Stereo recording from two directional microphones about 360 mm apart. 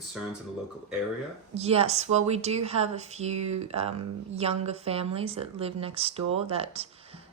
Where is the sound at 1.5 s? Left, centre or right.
Centre.